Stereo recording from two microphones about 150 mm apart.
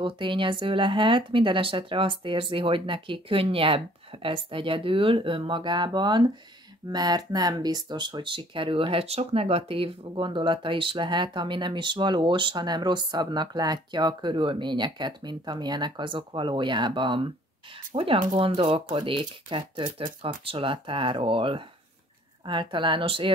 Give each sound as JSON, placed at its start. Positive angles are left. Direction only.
{"t": 0.0, "sound": "speech", "side_deg": -35}